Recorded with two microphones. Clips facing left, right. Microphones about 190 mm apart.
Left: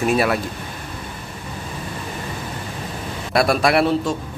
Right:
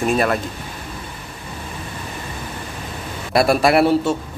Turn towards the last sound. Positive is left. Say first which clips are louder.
# right 3 dB
turn(degrees=-5)  # may be behind; listen again after turning